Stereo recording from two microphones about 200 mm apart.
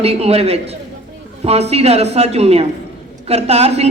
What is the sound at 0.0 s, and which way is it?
A woman's voice, 30° right (ahead or behind).